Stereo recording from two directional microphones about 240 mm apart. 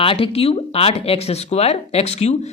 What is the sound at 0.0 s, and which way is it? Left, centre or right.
Speech, left.